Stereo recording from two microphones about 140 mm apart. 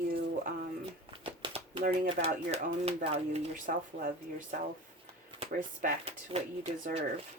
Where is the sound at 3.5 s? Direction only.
75° right (ahead or behind).